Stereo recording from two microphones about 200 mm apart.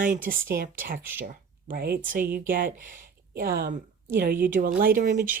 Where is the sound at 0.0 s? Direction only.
40° right (ahead or behind).